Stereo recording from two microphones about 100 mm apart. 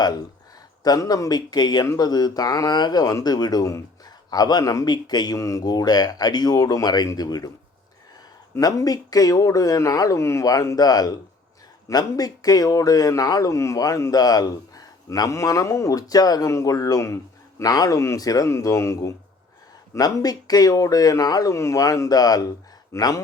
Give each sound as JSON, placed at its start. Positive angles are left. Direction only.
{"t": 0.9, "sound": "a man's voice", "side_deg": 40}
{"t": 8.5, "sound": "a man's voice", "side_deg": 40}